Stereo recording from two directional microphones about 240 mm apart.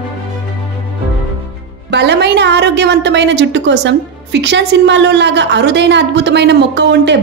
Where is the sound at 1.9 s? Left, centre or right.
Right.